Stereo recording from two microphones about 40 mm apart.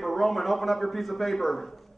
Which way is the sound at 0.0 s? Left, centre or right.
Centre.